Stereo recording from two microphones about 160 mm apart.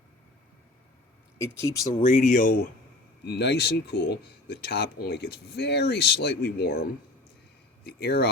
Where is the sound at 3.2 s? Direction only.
90° left.